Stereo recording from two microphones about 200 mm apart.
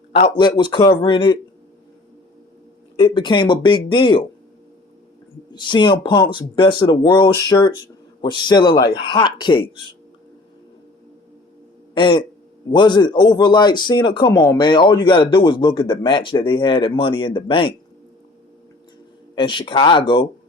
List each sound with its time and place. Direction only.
0.1 s a man's voice: 25° left (ahead or behind)
2.9 s a man's voice: 25° left (ahead or behind)
5.5 s a man's voice: 20° left (ahead or behind)
11.9 s a man's voice: 25° left (ahead or behind)
19.4 s a man's voice: 25° left (ahead or behind)